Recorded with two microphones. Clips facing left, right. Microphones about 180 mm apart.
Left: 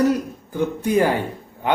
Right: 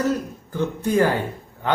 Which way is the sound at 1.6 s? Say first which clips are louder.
Left 2 dB; 15° left (ahead or behind).